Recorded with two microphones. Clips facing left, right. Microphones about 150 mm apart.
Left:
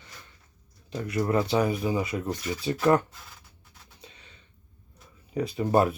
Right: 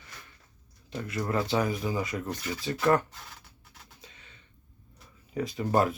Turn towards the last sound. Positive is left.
turn(degrees=25)  # may be behind; listen again after turning